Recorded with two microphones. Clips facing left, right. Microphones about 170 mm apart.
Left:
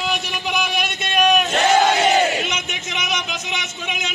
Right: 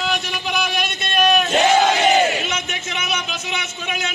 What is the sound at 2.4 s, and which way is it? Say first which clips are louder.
A man's voice: right 1 dB; 20° left (ahead or behind).